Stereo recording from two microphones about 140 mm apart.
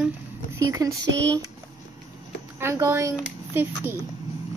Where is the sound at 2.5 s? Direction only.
20° right (ahead or behind).